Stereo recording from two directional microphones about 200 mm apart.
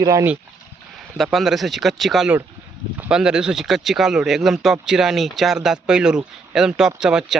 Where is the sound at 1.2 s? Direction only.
Centre (ahead or behind).